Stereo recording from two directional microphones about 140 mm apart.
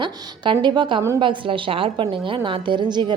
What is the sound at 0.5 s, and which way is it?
Speech, 35° right (ahead or behind).